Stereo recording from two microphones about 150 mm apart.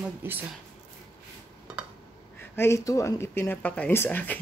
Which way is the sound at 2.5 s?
15° left (ahead or behind).